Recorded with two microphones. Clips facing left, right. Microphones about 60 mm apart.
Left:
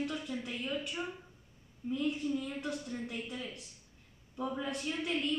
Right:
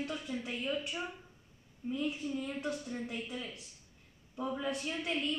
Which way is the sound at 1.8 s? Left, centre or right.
Centre.